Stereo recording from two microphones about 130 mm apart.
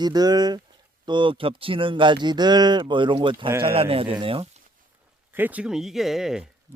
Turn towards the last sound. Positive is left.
turn(degrees=-5)  # may be behind; listen again after turning